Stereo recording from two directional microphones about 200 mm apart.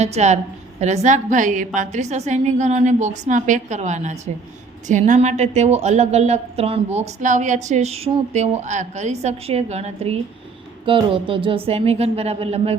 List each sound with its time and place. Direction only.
0.0 s a woman's voice: 35° right (ahead or behind)